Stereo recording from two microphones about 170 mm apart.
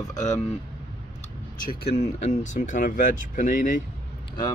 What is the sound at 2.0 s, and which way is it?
Speech, 45° left (ahead or behind).